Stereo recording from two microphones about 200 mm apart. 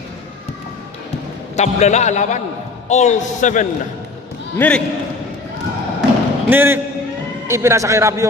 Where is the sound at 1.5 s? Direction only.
35° left (ahead or behind).